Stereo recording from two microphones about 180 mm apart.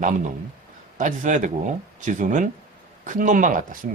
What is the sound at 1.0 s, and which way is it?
Speech, 45° right (ahead or behind).